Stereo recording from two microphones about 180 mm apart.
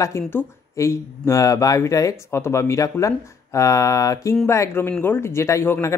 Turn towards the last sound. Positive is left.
turn(degrees=15)  # may be behind; listen again after turning